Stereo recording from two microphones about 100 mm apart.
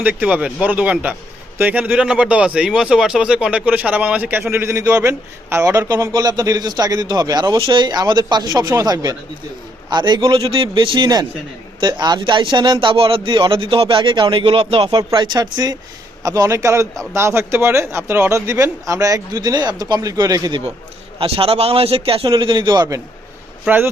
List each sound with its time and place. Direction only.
0.0 s speech: 15° right (ahead or behind)
4.5 s a man's voice: 30° right (ahead or behind)
6.1 s a man's voice: 40° right (ahead or behind); by 14.8 s 70° right (ahead or behind)
14.8 s a man's voice: 50° right (ahead or behind)
21.2 s a man's voice: 70° right (ahead or behind); by 22.9 s 50° right (ahead or behind)
23.6 s a man's voice: 20° right (ahead or behind)